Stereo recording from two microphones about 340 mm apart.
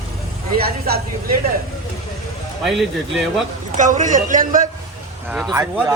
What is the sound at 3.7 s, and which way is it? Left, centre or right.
Speech, right.